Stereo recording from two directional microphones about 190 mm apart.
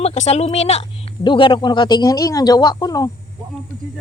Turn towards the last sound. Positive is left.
turn(degrees=20)  # may be behind; listen again after turning